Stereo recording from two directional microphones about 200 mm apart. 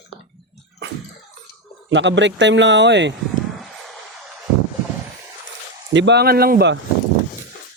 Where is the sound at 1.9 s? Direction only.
65° right (ahead or behind).